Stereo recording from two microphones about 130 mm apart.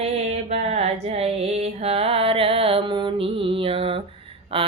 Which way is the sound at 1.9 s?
50° right (ahead or behind).